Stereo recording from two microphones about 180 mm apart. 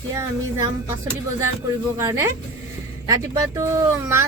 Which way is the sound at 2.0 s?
20° right (ahead or behind).